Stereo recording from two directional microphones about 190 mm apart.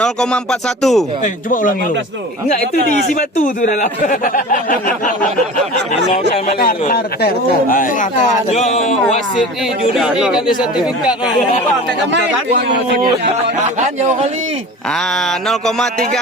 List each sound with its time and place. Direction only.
0.0 s speech: 5° left (ahead or behind)
1.2 s speech: 45° left (ahead or behind)
3.2 s speech: 45° left (ahead or behind)
6.6 s speech: 50° left (ahead or behind)
9.9 s speech: centre (ahead or behind)
12.1 s speech: 65° right (ahead or behind)
13.7 s speech: 40° right (ahead or behind)
15.4 s speech: centre (ahead or behind)